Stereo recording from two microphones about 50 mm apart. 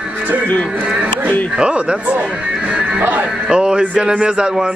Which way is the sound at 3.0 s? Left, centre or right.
Right.